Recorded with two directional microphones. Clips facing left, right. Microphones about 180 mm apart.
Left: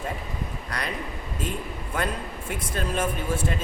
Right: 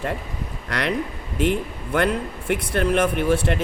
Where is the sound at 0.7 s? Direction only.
75° right (ahead or behind).